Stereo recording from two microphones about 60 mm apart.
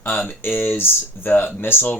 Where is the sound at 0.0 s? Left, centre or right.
Left.